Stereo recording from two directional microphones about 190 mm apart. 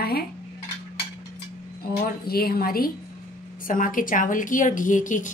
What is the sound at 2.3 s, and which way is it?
A woman's voice, 55° left (ahead or behind).